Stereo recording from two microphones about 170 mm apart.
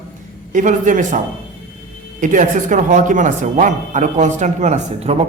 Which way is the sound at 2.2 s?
50° right (ahead or behind).